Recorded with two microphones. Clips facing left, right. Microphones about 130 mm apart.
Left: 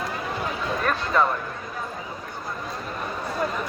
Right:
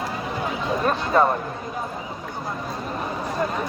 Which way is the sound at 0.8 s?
25° right (ahead or behind).